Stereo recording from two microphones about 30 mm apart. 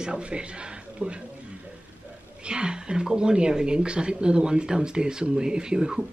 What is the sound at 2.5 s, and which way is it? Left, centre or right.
Speech, right.